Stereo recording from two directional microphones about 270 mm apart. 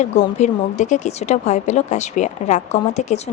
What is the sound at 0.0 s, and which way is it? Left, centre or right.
Speech, left.